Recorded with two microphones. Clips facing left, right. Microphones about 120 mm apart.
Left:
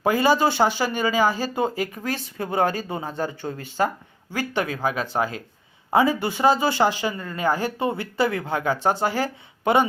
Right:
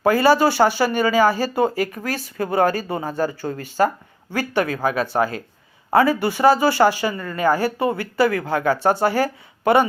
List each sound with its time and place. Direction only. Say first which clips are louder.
0.0 s speech: right 4 dB; 15° left (ahead or behind)